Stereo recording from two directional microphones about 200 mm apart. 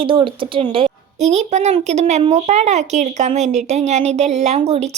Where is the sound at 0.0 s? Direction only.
25° right (ahead or behind).